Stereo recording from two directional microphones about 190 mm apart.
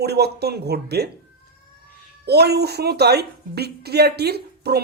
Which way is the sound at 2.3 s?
60° right (ahead or behind).